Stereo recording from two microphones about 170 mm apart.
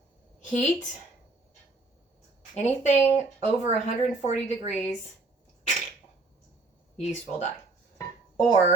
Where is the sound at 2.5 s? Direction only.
40° left (ahead or behind).